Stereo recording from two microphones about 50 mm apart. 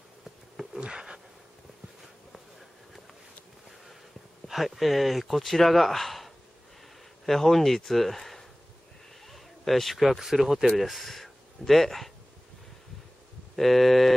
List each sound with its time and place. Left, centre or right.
0.7 s a sound: centre
4.5 s speech: centre
13.6 s speech: centre